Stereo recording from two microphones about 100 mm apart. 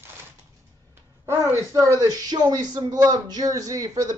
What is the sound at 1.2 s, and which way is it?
Speech, 25° right (ahead or behind).